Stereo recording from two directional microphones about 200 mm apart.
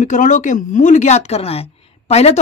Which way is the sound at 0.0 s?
40° left (ahead or behind).